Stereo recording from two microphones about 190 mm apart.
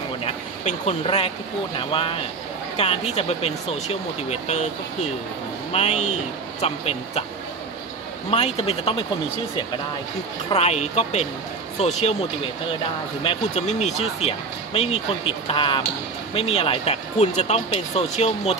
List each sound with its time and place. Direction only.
0.2 s a sound: 30° left (ahead or behind)
1.8 s speech: 25° left (ahead or behind)
5.7 s speech: 35° left (ahead or behind)
8.3 s speech: 30° left (ahead or behind)
10.5 s speech: 35° left (ahead or behind)
13.2 s speech: 30° left (ahead or behind)